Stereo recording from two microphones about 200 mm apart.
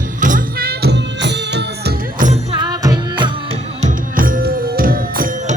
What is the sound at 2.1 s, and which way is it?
Music, 40° right (ahead or behind).